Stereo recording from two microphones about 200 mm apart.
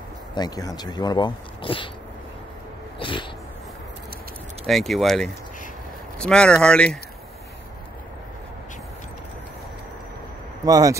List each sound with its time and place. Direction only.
0.3 s speech: 20° left (ahead or behind)
3.0 s cat: 25° left (ahead or behind)
4.6 s speech: centre (ahead or behind)
10.6 s speech: 15° right (ahead or behind)